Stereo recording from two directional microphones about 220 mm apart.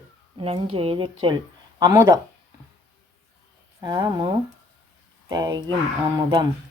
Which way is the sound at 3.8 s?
15° right (ahead or behind).